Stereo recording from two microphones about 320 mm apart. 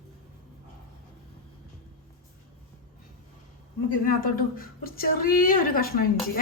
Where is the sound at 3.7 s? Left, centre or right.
Left.